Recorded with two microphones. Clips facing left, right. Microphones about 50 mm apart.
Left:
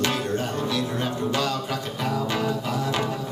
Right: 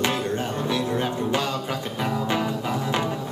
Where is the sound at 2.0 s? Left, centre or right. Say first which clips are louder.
Right 1 dB; centre.